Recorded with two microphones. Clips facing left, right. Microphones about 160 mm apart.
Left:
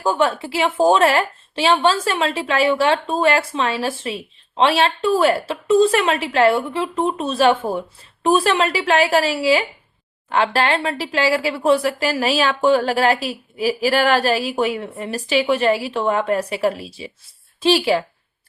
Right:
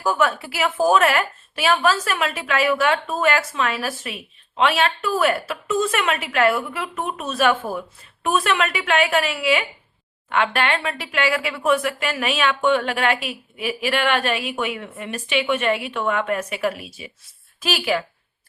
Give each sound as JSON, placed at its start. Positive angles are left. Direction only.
{"t": 0.0, "sound": "a woman's voice", "side_deg": 30}